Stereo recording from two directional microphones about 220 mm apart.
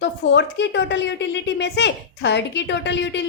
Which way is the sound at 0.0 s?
50° left (ahead or behind).